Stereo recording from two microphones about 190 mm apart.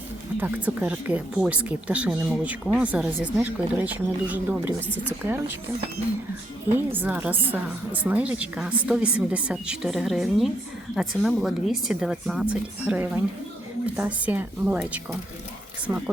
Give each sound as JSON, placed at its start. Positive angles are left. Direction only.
{"t": 0.3, "sound": "a woman's voice", "side_deg": -10}
{"t": 6.7, "sound": "a woman's voice", "side_deg": -10}